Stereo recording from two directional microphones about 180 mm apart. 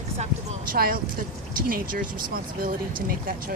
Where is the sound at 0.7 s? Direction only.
55° right (ahead or behind).